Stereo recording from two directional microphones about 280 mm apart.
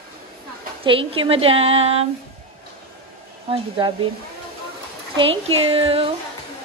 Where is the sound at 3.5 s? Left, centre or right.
Centre.